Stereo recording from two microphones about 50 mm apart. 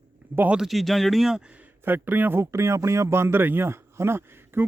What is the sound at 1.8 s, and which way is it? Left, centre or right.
Speech, right.